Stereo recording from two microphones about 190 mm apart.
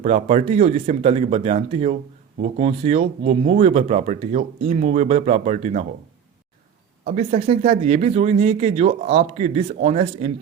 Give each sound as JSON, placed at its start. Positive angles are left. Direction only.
{"t": 0.0, "sound": "speech", "side_deg": -35}
{"t": 7.0, "sound": "speech", "side_deg": -40}